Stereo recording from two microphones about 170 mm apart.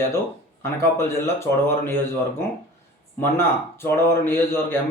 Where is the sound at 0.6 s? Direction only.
15° left (ahead or behind).